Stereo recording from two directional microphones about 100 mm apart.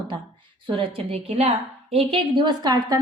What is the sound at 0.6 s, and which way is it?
A woman's voice, 75° right (ahead or behind).